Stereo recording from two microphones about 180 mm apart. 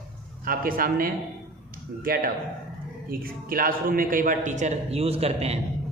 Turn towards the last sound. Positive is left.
turn(degrees=-35)  # may be behind; listen again after turning